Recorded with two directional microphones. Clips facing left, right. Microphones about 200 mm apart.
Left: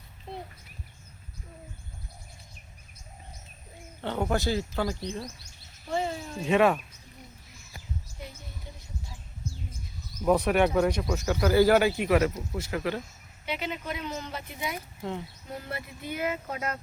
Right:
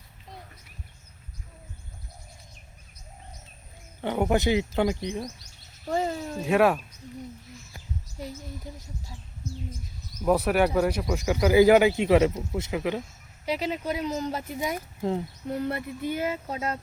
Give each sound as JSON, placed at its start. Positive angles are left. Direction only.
{"t": 4.0, "sound": "speech", "side_deg": -15}
{"t": 6.4, "sound": "speech", "side_deg": -5}
{"t": 8.7, "sound": "speech", "side_deg": -35}
{"t": 10.2, "sound": "speech", "side_deg": -5}
{"t": 13.4, "sound": "speech", "side_deg": -35}
{"t": 15.4, "sound": "speech", "side_deg": -60}